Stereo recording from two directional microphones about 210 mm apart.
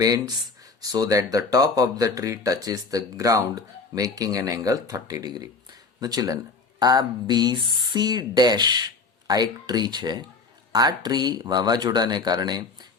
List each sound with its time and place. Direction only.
0.0 s speech: 15° right (ahead or behind)